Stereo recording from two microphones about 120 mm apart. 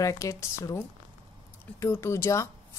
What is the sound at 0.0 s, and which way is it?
A woman's voice, 25° left (ahead or behind).